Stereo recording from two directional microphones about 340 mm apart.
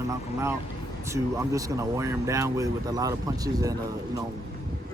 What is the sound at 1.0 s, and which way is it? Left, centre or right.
Speech, centre.